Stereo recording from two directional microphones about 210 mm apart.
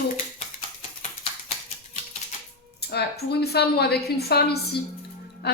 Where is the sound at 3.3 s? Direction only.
50° left (ahead or behind).